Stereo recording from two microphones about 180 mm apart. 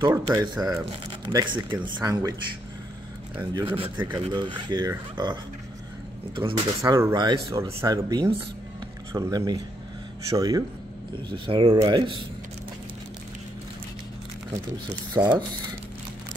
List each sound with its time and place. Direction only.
0.1 s speech: 20° right (ahead or behind)
3.5 s speech: 30° right (ahead or behind)
6.8 s speech: 15° right (ahead or behind)
15.1 s speech: 25° right (ahead or behind)